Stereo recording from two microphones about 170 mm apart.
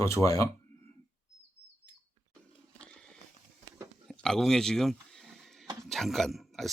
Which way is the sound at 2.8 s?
5° left (ahead or behind).